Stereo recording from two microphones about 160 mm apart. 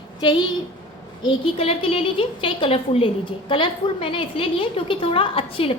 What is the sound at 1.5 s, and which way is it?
A woman's voice, 40° left (ahead or behind).